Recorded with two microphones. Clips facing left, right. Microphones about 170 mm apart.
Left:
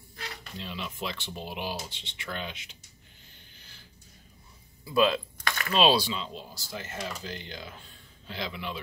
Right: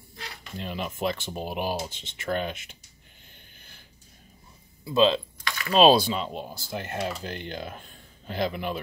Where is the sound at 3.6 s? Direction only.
55° right (ahead or behind).